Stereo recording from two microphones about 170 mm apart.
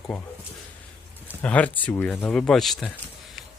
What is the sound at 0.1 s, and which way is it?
Speech, centre (ahead or behind).